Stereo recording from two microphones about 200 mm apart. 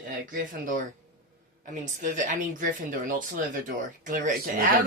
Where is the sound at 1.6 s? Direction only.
40° right (ahead or behind).